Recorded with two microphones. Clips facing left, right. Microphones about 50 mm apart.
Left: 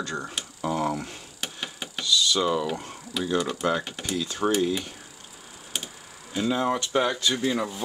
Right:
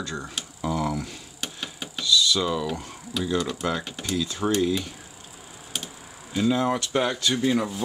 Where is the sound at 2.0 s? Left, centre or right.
Left.